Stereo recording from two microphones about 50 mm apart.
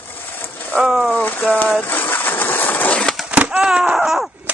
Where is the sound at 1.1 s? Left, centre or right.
Left.